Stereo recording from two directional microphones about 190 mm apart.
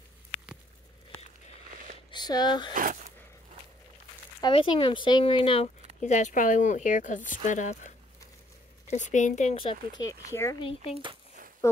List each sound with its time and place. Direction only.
2.0 s speech: 20° left (ahead or behind)
2.7 s speech: 45° right (ahead or behind)
4.4 s speech: 25° left (ahead or behind)
10.0 s speech: 80° left
10.3 s speech: 15° left (ahead or behind)